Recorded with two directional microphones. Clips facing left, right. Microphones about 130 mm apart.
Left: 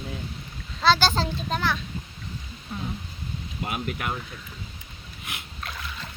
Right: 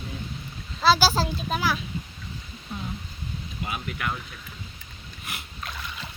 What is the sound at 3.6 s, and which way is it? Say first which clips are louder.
Speech: left 1 dB; 50° left (ahead or behind).